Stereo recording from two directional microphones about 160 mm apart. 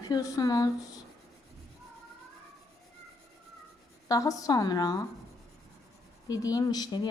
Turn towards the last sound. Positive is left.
turn(degrees=25)  # may be behind; listen again after turning